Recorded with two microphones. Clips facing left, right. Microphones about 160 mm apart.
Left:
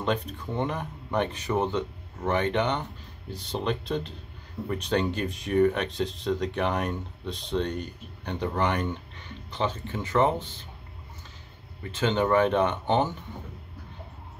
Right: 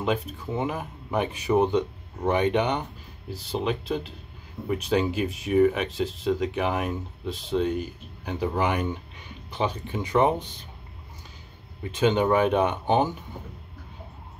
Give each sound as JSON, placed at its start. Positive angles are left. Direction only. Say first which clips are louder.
{"t": 0.0, "sound": "speech", "louder": "right 2 dB", "side_deg": -5}
{"t": 11.9, "sound": "speech", "louder": "right 2 dB", "side_deg": -15}